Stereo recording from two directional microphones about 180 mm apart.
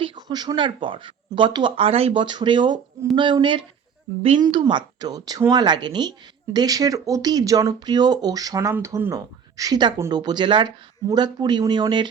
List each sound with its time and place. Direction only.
0.0 s speech: 25° right (ahead or behind)